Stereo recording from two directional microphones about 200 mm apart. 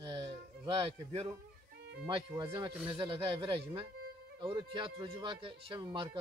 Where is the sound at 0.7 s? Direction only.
30° right (ahead or behind).